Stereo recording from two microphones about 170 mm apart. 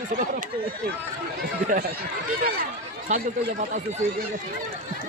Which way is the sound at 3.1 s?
45° right (ahead or behind).